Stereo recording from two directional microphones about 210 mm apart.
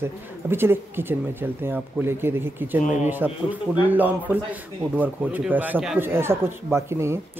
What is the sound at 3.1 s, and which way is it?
Speech, 10° right (ahead or behind).